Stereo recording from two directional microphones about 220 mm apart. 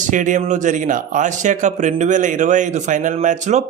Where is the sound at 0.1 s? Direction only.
35° right (ahead or behind).